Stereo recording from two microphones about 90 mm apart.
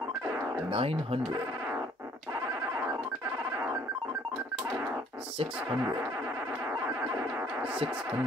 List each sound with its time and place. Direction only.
0.7 s speech: 90° right